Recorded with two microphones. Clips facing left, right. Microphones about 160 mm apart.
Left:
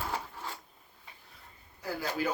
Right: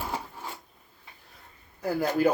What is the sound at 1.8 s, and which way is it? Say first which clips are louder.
Speech: right 9 dB; 55° right (ahead or behind).